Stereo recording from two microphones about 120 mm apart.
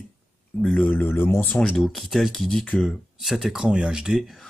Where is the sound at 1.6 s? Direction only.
5° left (ahead or behind).